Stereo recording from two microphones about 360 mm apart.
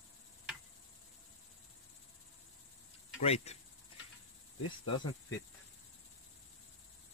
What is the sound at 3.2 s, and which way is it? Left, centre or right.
Speech, centre.